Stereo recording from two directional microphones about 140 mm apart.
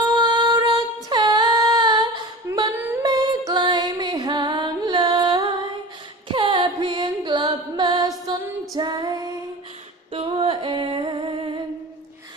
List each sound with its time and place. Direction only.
0.2 s female singing: 30° right (ahead or behind)
3.0 s music: 30° right (ahead or behind)
8.3 s female singing: 30° right (ahead or behind)
10.1 s female singing: 45° right (ahead or behind)